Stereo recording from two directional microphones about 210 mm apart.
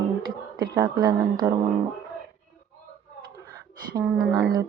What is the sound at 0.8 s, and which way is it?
Speech, 15° right (ahead or behind).